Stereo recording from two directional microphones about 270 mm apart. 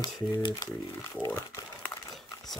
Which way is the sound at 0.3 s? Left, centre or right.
Centre.